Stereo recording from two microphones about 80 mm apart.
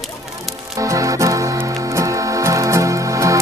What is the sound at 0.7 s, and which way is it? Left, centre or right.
Music, right.